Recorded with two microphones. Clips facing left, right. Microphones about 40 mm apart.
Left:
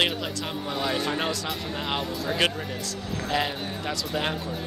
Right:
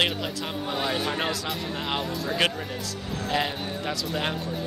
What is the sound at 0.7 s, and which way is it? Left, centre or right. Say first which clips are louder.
Speech: even; centre.